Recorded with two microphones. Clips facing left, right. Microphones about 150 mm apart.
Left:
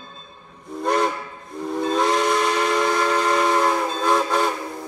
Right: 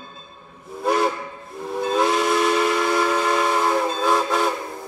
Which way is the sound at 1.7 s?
5° right (ahead or behind).